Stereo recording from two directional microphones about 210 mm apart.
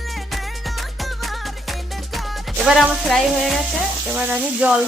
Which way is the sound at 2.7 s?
Centre (ahead or behind).